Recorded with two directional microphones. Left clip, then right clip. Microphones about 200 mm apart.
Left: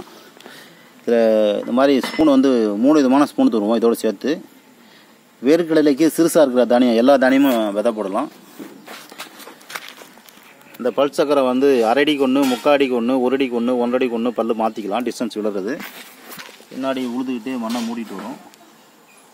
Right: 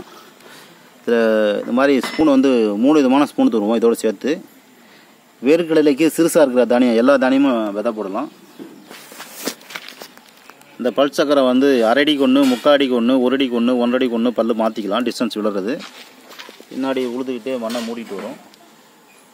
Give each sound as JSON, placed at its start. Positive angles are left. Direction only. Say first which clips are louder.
{"t": 0.5, "sound": "speech", "louder": "even", "side_deg": 0}
{"t": 5.4, "sound": "speech", "louder": "right 1 dB", "side_deg": -5}
{"t": 10.8, "sound": "speech", "louder": "right 1 dB", "side_deg": -20}
{"t": 16.8, "sound": "speech", "louder": "right 2 dB", "side_deg": -30}